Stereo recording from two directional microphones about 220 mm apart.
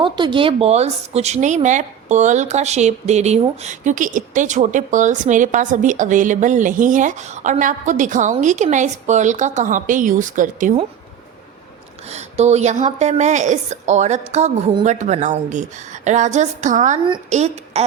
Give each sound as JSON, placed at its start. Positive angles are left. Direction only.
{"t": 0.0, "sound": "speech", "side_deg": -20}
{"t": 12.0, "sound": "speech", "side_deg": -30}